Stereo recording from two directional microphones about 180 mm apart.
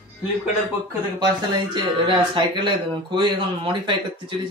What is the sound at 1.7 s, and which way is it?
Speech, 25° right (ahead or behind).